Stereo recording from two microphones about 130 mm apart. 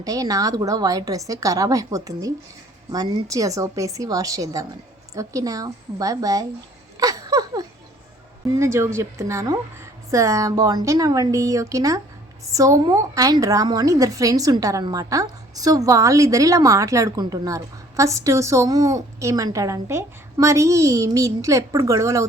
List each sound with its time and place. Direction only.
0.0 s a woman's voice: 25° right (ahead or behind)
6.9 s laughter: 25° right (ahead or behind)
8.5 s a woman's voice: 20° right (ahead or behind)